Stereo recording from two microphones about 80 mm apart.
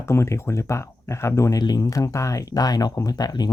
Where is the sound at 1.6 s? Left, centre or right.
Left.